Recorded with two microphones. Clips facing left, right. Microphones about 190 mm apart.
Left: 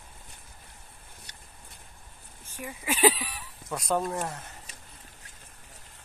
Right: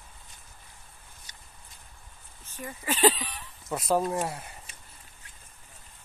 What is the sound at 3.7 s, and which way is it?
Speech, centre (ahead or behind).